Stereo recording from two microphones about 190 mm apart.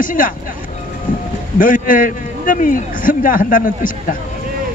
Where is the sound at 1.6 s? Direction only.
45° left (ahead or behind).